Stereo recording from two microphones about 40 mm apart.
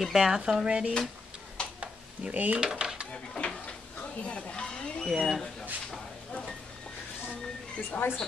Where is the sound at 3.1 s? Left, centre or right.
Left.